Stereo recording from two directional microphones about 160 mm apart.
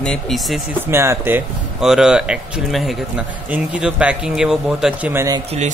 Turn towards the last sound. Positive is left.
turn(degrees=-15)  # may be behind; listen again after turning